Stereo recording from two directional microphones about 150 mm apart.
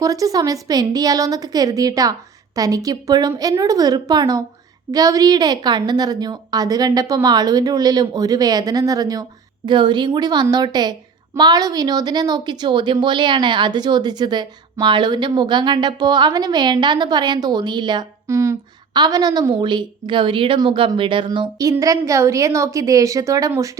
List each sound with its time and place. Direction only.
0.0 s a woman's voice: 25° right (ahead or behind)